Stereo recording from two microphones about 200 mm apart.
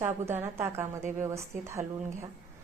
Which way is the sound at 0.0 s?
10° right (ahead or behind).